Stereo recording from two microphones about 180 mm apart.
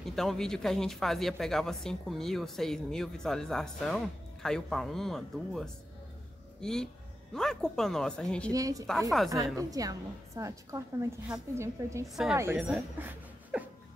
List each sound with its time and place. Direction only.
0.0 s speech: centre (ahead or behind)
8.5 s a woman's voice: 20° right (ahead or behind)
12.1 s speech: centre (ahead or behind)